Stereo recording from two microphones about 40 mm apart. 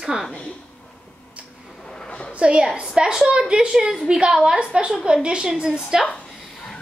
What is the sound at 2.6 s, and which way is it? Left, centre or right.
A woman's voice, centre.